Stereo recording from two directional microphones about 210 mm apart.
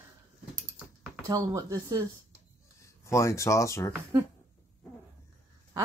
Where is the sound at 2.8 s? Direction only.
15° left (ahead or behind).